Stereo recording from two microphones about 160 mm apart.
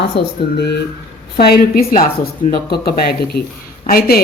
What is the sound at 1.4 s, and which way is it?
Speech, 70° left (ahead or behind).